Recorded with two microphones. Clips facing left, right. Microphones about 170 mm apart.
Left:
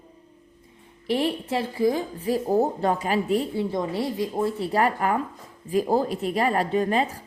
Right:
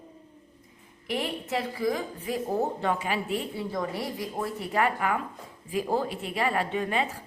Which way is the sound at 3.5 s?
25° left (ahead or behind).